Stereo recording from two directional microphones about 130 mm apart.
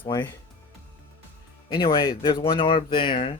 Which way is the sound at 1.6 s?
35° left (ahead or behind).